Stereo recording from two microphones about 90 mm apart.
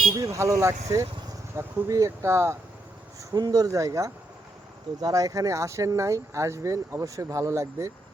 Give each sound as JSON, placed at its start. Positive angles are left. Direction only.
{"t": 0.2, "sound": "speech", "side_deg": -35}
{"t": 3.2, "sound": "speech", "side_deg": -45}